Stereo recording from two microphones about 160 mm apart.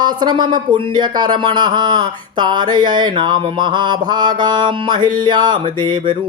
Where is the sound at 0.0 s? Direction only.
25° right (ahead or behind).